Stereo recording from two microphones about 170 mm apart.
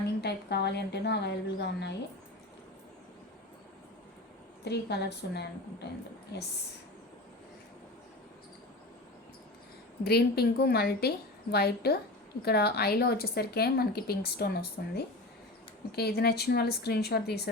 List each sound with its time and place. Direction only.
0.2 s speech: 75° left (ahead or behind)
4.6 s speech: 80° left
10.0 s speech: 70° left (ahead or behind)